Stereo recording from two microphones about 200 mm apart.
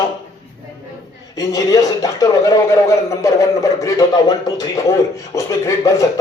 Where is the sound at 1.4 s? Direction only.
15° left (ahead or behind).